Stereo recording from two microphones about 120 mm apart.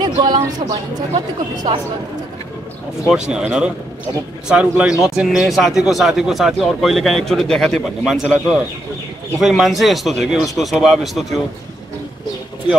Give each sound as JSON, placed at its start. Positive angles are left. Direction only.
{"t": 0.0, "sound": "a sound", "side_deg": -35}
{"t": 0.5, "sound": "a woman's voice", "side_deg": -35}
{"t": 3.3, "sound": "a man's voice", "side_deg": -5}